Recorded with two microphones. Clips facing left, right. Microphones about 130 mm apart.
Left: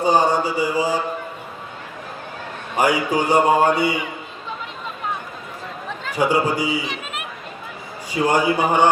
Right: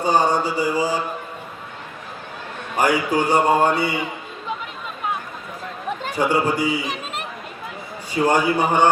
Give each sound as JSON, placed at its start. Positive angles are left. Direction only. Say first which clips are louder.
{"t": 0.0, "sound": "speech", "louder": "left 1 dB", "side_deg": 15}
{"t": 2.7, "sound": "speech", "louder": "even", "side_deg": 15}
{"t": 6.1, "sound": "speech", "louder": "left 1 dB", "side_deg": 10}
{"t": 6.8, "sound": "a sound", "louder": "right 1 dB", "side_deg": -40}
{"t": 8.3, "sound": "speech", "louder": "left 1 dB", "side_deg": 10}